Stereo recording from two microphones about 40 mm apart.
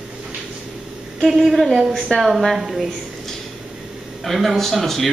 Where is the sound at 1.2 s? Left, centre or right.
Centre.